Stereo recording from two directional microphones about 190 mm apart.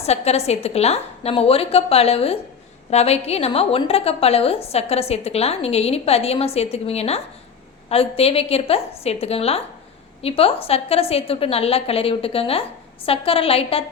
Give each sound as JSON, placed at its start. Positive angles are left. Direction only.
{"t": 0.0, "sound": "a woman's voice", "side_deg": 35}